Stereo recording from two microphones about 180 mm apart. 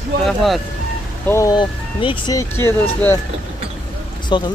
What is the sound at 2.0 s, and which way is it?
Speech, 25° left (ahead or behind).